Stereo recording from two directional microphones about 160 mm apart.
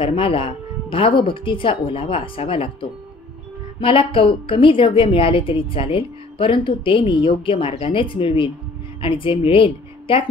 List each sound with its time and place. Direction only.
0.0 s a woman's voice: 35° left (ahead or behind)